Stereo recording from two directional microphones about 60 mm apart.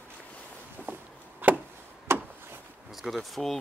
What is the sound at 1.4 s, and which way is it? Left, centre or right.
Chop, right.